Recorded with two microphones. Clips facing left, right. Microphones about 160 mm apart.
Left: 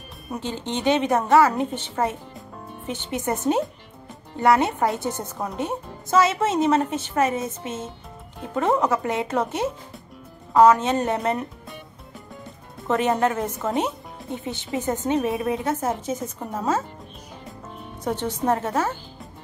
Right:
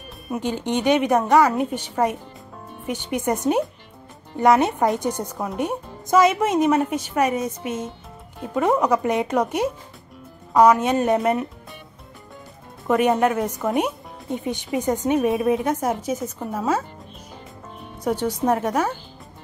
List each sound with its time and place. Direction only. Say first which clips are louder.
0.3 s speech: right 5 dB; 15° right (ahead or behind)
12.8 s speech: right 3 dB; 15° right (ahead or behind)
18.0 s speech: right 2 dB; 10° right (ahead or behind)